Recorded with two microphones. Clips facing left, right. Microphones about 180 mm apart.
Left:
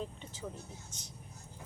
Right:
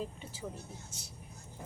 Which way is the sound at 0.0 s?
10° right (ahead or behind).